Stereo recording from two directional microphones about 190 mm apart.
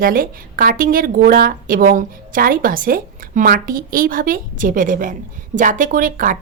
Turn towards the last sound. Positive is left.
turn(degrees=-45)  # may be behind; listen again after turning